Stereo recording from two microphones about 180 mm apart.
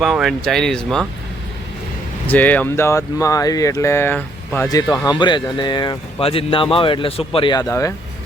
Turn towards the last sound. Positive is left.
turn(degrees=20)  # may be behind; listen again after turning